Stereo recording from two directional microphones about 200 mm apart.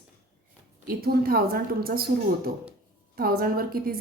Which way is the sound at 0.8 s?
50° right (ahead or behind).